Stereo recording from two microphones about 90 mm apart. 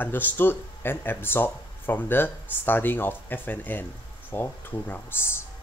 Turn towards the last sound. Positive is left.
turn(degrees=25)  # may be behind; listen again after turning